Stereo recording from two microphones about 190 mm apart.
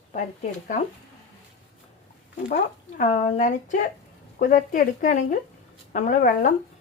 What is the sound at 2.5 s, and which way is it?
A woman's voice, 45° left (ahead or behind).